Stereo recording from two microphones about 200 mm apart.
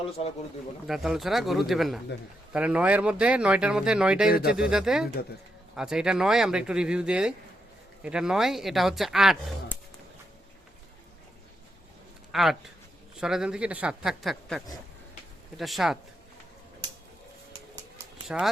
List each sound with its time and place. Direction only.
0.2 s speech: 30° left (ahead or behind)
0.9 s speech: centre (ahead or behind)
12.3 s speech: centre (ahead or behind)
18.3 s speech: 5° right (ahead or behind)